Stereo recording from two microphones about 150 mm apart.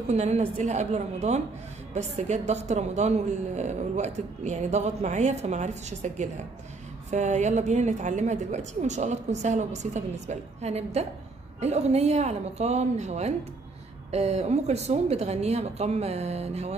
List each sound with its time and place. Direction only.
0.1 s a woman's voice: 45° right (ahead or behind)